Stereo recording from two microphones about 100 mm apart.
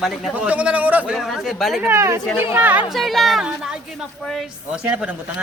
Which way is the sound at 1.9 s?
30° right (ahead or behind).